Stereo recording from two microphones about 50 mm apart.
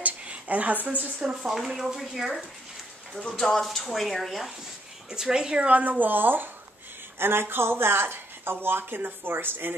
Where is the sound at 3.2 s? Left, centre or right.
Centre.